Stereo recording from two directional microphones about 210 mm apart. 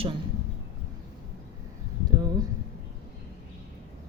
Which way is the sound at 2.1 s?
20° right (ahead or behind).